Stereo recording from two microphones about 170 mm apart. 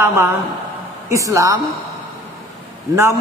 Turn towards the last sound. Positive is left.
turn(degrees=-15)  # may be behind; listen again after turning